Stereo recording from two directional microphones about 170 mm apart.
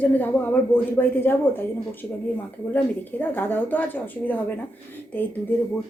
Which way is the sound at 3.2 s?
10° left (ahead or behind).